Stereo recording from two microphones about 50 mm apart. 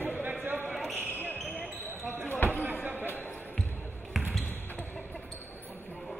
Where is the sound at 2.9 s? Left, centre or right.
Right.